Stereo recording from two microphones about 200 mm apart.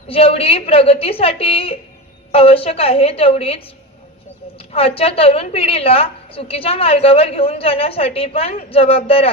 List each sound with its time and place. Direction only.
0.1 s a woman's voice: 30° left (ahead or behind)
4.7 s a woman's voice: 30° left (ahead or behind)